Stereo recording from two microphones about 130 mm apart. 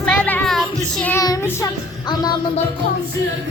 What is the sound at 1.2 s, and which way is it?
Child singing, 25° left (ahead or behind).